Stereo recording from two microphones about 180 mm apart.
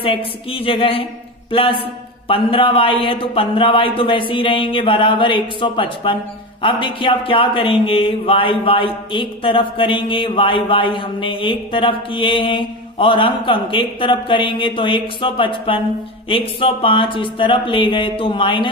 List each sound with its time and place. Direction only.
0.0 s speech: 30° left (ahead or behind)